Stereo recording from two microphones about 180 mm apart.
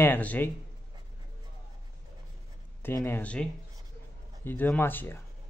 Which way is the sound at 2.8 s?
15° left (ahead or behind).